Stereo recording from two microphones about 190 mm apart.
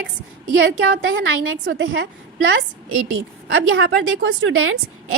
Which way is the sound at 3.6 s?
90° right.